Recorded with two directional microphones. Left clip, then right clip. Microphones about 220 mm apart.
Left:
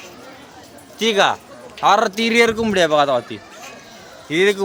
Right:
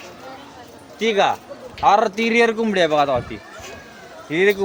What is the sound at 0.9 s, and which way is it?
A man's voice, 20° left (ahead or behind).